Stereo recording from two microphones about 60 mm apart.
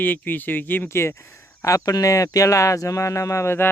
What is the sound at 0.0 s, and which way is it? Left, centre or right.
Speech, left.